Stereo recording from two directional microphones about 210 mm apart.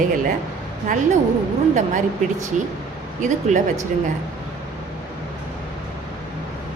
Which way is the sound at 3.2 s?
35° right (ahead or behind).